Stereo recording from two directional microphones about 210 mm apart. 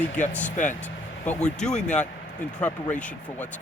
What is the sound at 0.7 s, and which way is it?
Vehicle, 5° left (ahead or behind).